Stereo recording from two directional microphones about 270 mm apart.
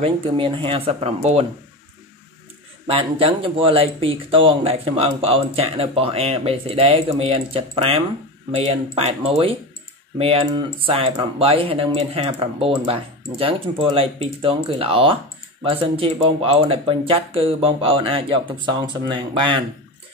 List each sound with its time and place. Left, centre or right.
0.0 s speech: centre
2.9 s speech: right